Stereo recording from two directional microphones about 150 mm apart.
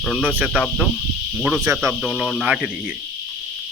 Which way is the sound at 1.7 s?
20° right (ahead or behind).